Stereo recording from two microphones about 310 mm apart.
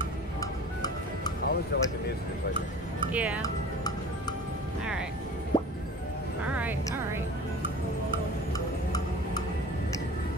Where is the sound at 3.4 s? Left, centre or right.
Centre.